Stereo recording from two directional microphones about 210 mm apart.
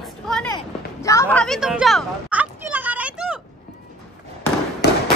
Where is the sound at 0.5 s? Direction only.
15° left (ahead or behind); by 3.4 s 5° right (ahead or behind).